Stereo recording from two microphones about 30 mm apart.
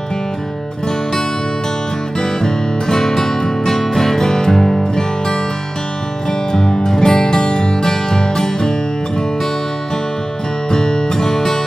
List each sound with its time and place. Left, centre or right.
2.1 s music: left
6.5 s music: left
10.7 s music: left